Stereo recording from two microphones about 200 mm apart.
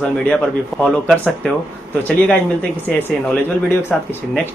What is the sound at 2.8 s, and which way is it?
A man's voice, 10° left (ahead or behind).